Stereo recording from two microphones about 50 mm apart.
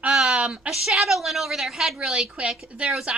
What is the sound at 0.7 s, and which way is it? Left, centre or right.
A woman's voice, centre.